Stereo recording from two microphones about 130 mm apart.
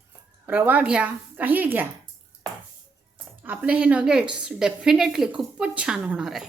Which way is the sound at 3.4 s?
10° right (ahead or behind).